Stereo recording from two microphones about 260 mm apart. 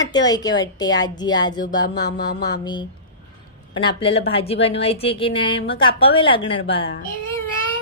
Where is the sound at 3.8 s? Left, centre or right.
Left.